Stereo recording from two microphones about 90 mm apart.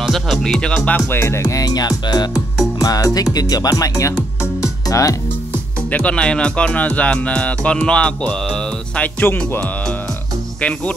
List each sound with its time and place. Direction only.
0.0 s music: centre (ahead or behind)
1.1 s music: 30° left (ahead or behind)
4.8 s speech: 40° left (ahead or behind)
5.9 s speech: 15° left (ahead or behind)